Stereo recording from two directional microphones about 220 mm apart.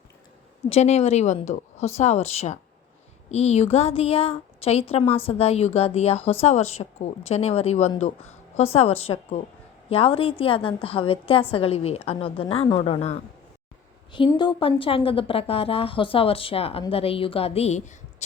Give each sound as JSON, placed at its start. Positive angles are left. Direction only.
{"t": 0.7, "sound": "a woman's voice", "side_deg": 30}